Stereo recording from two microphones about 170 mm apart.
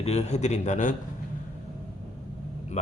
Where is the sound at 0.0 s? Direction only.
40° left (ahead or behind).